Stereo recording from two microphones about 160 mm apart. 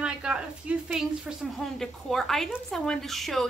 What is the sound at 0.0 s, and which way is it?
A woman's voice, 5° right (ahead or behind).